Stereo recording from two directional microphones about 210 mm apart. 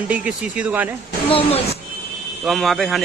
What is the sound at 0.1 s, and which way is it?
Speech, 5° right (ahead or behind).